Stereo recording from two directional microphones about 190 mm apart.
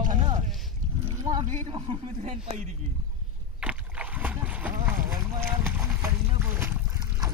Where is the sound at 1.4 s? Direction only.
35° right (ahead or behind).